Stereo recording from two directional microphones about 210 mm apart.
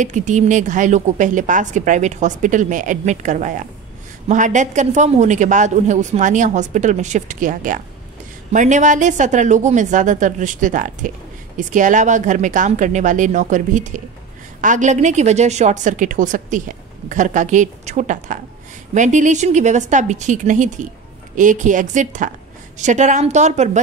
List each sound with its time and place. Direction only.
0.0 s a woman's voice: 35° right (ahead or behind)